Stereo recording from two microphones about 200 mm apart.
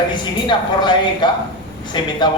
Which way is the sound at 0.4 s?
20° left (ahead or behind).